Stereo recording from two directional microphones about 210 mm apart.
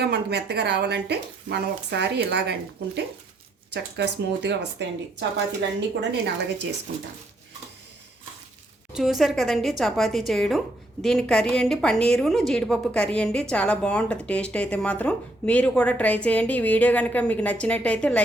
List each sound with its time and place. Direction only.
0.0 s speech: 50° right (ahead or behind)
6.0 s speech: 55° right (ahead or behind)
8.9 s a woman's voice: centre (ahead or behind)